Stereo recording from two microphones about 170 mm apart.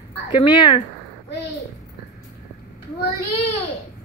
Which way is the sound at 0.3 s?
30° left (ahead or behind).